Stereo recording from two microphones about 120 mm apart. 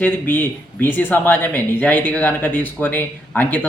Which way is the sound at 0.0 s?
15° left (ahead or behind).